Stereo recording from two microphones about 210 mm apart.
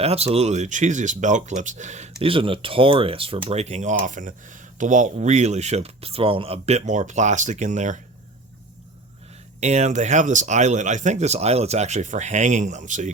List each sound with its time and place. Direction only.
0.0 s speech: 30° right (ahead or behind)
9.6 s speech: 35° right (ahead or behind)